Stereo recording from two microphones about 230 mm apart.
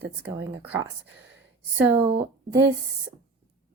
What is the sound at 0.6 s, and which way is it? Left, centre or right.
Speech, centre.